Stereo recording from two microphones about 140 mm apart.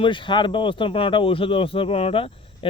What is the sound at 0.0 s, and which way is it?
Speech, 35° left (ahead or behind).